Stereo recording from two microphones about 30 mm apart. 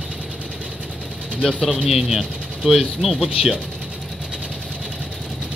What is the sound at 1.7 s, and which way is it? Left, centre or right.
Speech, right.